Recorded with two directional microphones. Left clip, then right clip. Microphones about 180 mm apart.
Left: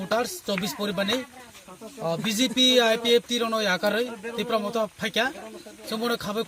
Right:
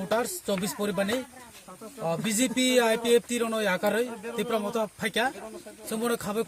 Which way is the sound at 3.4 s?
10° right (ahead or behind).